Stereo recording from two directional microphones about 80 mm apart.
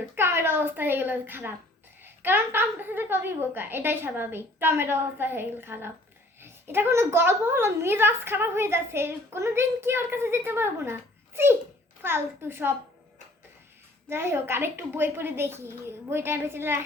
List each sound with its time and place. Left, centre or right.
0.2 s a woman's voice: right
14.1 s a woman's voice: right